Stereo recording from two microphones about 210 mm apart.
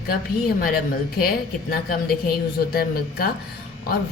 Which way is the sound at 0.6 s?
45° left (ahead or behind).